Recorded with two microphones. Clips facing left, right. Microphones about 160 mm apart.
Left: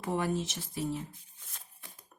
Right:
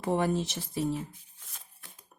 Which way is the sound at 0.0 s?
30° right (ahead or behind).